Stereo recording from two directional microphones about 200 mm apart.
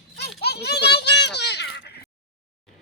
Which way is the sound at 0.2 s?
55° left (ahead or behind).